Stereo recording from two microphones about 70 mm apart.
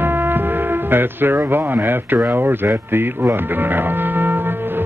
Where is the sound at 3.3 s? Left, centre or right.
Right.